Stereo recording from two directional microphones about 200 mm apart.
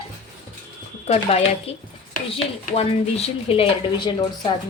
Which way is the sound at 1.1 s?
30° left (ahead or behind).